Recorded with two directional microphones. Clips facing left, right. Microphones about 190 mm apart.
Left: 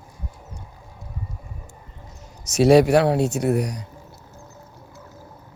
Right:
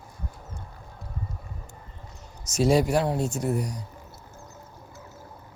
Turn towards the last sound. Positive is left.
turn(degrees=75)  # may be behind; listen again after turning